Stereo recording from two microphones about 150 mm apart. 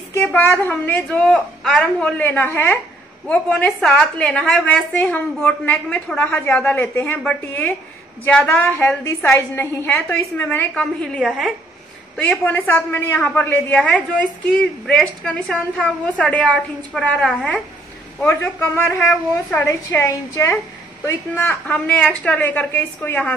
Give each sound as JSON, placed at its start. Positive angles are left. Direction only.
{"t": 0.2, "sound": "a man's voice", "side_deg": 10}
{"t": 12.2, "sound": "a man's voice", "side_deg": 10}
{"t": 18.2, "sound": "a man's voice", "side_deg": 15}